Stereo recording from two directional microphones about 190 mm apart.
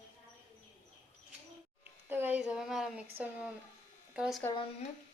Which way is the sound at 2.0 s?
10° right (ahead or behind).